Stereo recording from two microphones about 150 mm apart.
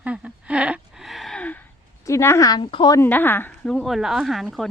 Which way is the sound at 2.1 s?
20° left (ahead or behind).